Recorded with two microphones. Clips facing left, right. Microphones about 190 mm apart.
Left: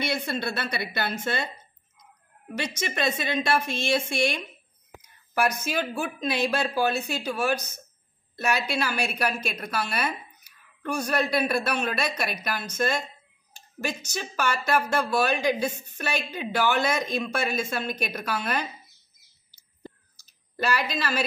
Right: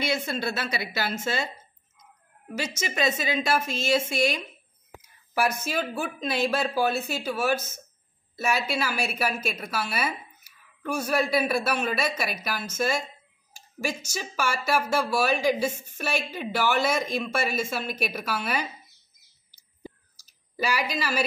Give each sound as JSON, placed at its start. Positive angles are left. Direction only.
{"t": 0.2, "sound": "a woman's voice", "side_deg": -5}
{"t": 19.8, "sound": "clicking", "side_deg": -10}